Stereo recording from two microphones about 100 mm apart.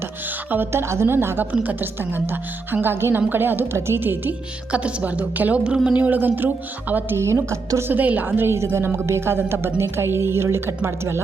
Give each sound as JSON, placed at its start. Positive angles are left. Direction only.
{"t": 0.5, "sound": "a woman's voice", "side_deg": -25}